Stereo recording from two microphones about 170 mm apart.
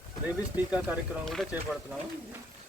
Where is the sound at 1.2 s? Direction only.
Centre (ahead or behind).